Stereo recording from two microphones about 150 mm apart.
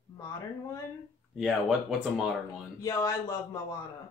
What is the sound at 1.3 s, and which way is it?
Speech, 5° right (ahead or behind).